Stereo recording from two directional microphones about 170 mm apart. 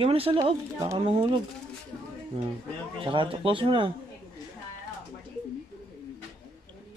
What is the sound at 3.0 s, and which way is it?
Livestock, 30° right (ahead or behind).